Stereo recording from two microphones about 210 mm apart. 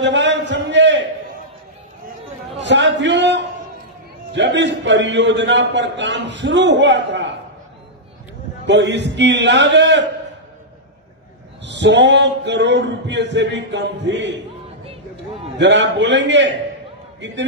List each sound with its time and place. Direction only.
0.0 s a sound: 60° right (ahead or behind)
2.6 s a man's voice: 55° right (ahead or behind)
8.6 s a man's voice: 55° right (ahead or behind)
11.6 s a man's voice: 55° right (ahead or behind)
15.5 s a man's voice: 55° right (ahead or behind)